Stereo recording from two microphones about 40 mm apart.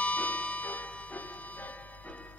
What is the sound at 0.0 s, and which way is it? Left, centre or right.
Music, left.